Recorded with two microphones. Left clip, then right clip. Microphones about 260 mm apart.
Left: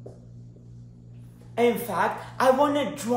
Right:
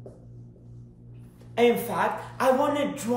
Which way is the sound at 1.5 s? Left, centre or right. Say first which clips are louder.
Right 1 dB; centre.